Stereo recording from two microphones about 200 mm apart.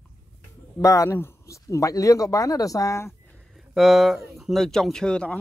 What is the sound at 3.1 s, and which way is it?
Speech, centre (ahead or behind).